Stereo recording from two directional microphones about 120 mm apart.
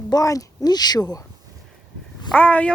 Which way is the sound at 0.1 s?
30° left (ahead or behind).